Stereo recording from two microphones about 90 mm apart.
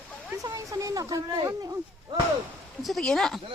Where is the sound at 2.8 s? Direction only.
5° left (ahead or behind).